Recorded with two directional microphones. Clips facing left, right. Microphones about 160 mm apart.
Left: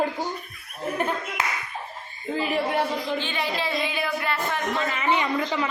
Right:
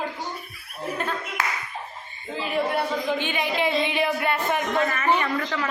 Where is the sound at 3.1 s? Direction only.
15° right (ahead or behind).